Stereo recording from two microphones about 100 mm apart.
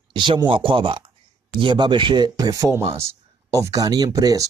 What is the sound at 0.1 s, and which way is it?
Speech, 50° right (ahead or behind).